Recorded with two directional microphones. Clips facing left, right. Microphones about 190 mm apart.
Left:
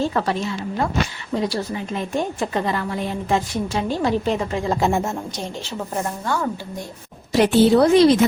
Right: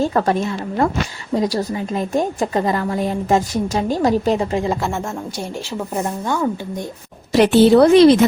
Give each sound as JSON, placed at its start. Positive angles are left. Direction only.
{"t": 0.0, "sound": "a woman's voice", "side_deg": -45}
{"t": 4.8, "sound": "speech", "side_deg": 15}
{"t": 5.4, "sound": "speech", "side_deg": -10}
{"t": 7.3, "sound": "speech", "side_deg": -70}